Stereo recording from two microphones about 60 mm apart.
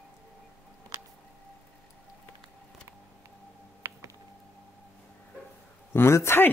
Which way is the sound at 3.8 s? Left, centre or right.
Right.